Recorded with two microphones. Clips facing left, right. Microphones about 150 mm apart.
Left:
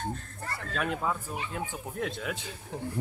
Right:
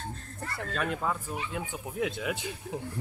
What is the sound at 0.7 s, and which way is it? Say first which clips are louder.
Speech: left 1 dB; centre (ahead or behind).